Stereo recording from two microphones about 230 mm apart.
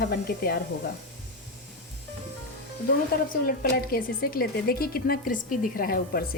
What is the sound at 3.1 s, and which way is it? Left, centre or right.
A woman's voice, left.